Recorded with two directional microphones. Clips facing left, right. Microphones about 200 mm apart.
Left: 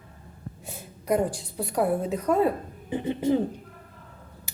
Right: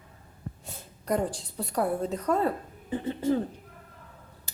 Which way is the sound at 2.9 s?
15° left (ahead or behind).